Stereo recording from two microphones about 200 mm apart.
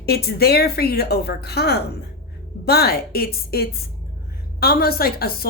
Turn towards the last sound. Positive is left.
turn(degrees=50)  # may be behind; listen again after turning